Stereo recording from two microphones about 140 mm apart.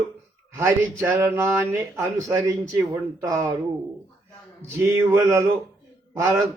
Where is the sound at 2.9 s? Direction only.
25° right (ahead or behind).